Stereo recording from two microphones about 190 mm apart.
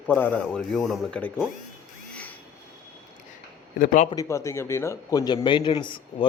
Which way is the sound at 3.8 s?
40° left (ahead or behind).